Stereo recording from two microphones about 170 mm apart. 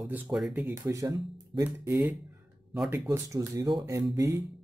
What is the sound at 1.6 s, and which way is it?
Speech, 10° right (ahead or behind).